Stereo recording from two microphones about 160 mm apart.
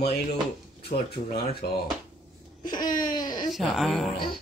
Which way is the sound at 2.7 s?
25° left (ahead or behind).